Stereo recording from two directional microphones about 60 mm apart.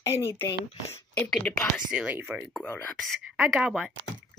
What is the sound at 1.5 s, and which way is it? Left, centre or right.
Speech, left.